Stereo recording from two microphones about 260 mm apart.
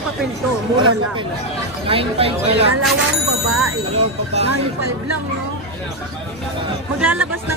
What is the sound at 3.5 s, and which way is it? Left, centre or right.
Bicycle bell, right.